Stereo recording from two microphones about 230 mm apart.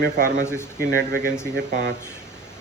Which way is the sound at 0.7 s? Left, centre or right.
Right.